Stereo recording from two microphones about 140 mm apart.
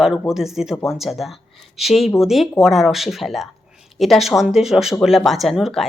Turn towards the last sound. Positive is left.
turn(degrees=0)  # may be behind; listen again after turning